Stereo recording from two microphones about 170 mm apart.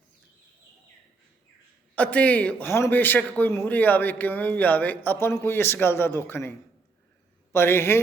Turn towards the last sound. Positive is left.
turn(degrees=15)  # may be behind; listen again after turning